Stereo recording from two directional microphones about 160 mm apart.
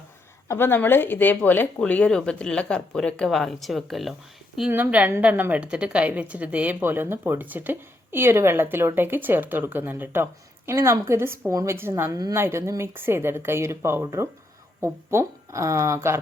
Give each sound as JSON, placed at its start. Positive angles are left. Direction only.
{"t": 0.4, "sound": "a woman's voice", "side_deg": 15}